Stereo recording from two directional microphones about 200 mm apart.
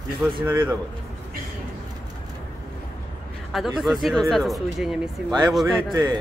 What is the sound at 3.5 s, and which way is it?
Speech, centre (ahead or behind).